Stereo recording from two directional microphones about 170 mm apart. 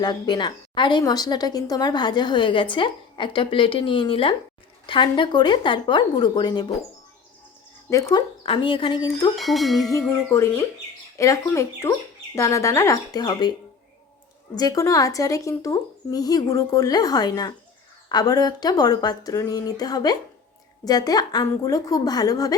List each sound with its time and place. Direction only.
0.0 s speech: 25° left (ahead or behind)
7.9 s speech: 20° left (ahead or behind)
8.4 s speech: 30° left (ahead or behind)
9.3 s speech: centre (ahead or behind)
10.0 s speech: 15° left (ahead or behind)
14.5 s speech: 20° left (ahead or behind)